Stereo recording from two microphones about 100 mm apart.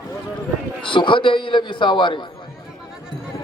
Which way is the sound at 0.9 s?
55° left (ahead or behind).